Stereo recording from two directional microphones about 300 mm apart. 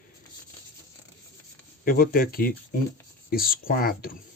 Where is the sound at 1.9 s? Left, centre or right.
Left.